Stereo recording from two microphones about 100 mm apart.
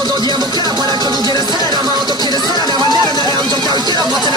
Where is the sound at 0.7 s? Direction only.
45° right (ahead or behind).